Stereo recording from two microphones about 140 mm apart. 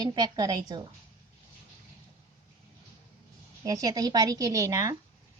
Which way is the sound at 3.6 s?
25° right (ahead or behind).